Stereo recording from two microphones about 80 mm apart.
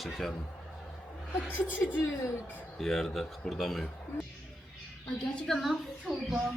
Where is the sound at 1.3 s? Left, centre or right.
Left.